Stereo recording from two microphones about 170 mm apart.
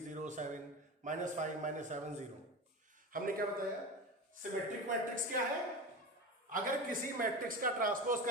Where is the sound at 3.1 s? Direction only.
55° right (ahead or behind).